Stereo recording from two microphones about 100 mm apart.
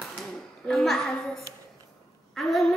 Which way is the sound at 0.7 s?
Centre (ahead or behind).